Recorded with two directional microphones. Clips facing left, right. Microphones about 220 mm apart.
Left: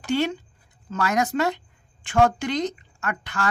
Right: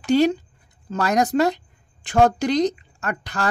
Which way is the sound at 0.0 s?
40° right (ahead or behind).